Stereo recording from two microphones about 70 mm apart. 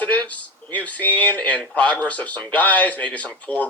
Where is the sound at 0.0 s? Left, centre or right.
Left.